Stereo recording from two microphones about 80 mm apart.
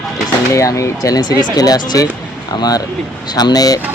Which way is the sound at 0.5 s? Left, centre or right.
Left.